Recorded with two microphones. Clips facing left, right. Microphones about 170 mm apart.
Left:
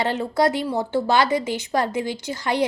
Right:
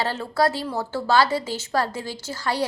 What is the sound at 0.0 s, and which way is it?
A woman's voice, 20° left (ahead or behind).